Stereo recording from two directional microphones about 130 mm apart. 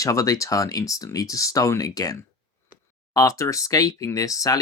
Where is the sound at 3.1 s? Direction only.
25° left (ahead or behind).